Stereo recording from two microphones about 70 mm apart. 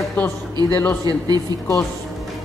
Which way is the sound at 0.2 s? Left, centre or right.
Left.